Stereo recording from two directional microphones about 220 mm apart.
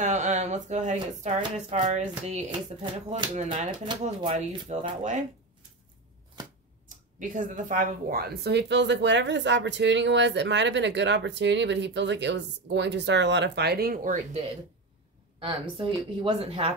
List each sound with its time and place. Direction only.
0.0 s speech: 35° right (ahead or behind)
7.2 s a woman's voice: 35° right (ahead or behind)
15.3 s speech: 25° right (ahead or behind)